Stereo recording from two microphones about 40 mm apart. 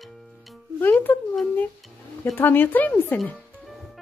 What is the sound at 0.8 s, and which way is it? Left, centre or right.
Speech, left.